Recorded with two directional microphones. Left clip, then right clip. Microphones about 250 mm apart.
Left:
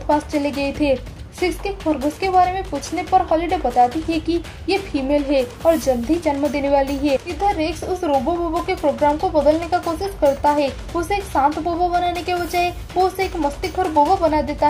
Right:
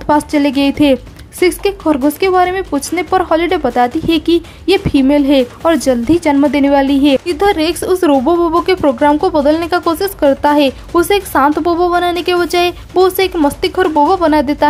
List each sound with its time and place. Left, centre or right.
0.0 s speech: centre